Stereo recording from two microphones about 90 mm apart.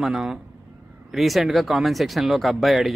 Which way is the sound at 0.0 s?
5° right (ahead or behind).